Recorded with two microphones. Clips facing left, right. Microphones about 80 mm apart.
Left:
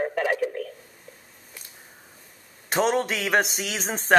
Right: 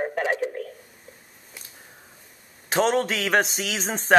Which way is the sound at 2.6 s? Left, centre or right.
Centre.